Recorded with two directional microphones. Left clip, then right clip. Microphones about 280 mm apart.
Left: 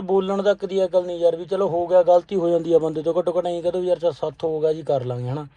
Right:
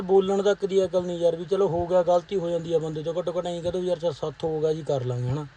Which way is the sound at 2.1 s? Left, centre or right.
Centre.